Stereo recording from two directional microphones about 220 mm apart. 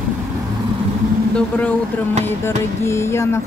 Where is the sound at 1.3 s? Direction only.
5° left (ahead or behind).